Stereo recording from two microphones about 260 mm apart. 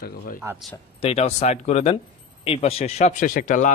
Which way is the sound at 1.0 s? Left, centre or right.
Left.